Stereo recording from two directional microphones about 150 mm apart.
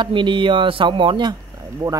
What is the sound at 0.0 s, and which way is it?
Speech, 30° right (ahead or behind).